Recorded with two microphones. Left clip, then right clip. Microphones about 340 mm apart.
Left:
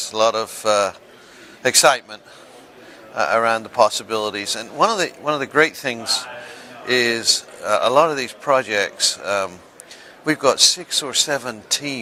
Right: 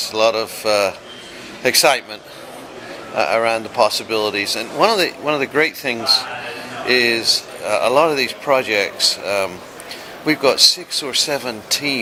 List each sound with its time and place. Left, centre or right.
0.1 s speech: left
3.2 s speech: left